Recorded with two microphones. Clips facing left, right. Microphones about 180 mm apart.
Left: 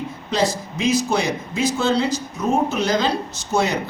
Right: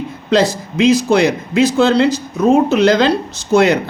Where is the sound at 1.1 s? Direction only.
70° right (ahead or behind).